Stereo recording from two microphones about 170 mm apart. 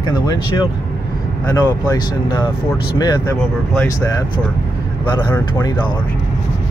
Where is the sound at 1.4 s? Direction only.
20° left (ahead or behind).